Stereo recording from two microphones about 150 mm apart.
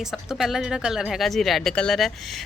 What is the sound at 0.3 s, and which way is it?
Speech, 5° right (ahead or behind).